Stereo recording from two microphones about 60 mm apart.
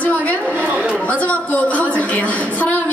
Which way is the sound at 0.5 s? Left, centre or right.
Right.